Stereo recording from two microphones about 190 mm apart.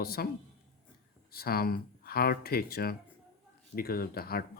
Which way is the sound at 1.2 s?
55° left (ahead or behind).